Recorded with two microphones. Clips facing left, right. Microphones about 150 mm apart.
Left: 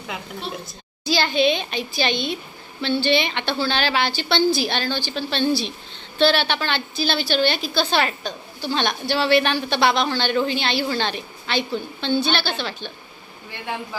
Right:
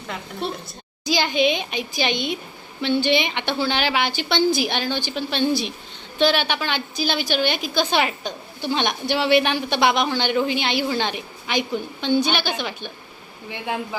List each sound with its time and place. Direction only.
1.0 s a woman's voice: 15° right (ahead or behind)